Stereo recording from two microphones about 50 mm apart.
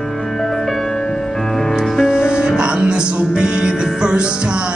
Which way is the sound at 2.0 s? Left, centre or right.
Centre.